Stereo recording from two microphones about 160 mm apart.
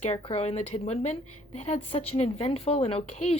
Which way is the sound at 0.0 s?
45° left (ahead or behind).